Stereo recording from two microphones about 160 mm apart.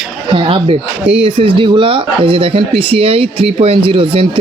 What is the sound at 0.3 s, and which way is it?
Speech, 35° right (ahead or behind).